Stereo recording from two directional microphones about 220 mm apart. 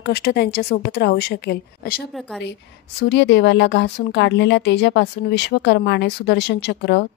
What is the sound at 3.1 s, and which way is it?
Speech, 50° left (ahead or behind).